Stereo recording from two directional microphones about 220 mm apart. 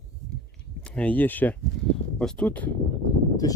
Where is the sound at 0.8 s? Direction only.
5° left (ahead or behind).